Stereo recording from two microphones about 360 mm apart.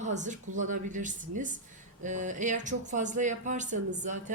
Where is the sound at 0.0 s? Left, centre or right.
Centre.